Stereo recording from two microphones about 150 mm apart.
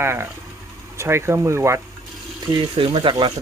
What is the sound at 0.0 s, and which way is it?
Speech, 15° right (ahead or behind).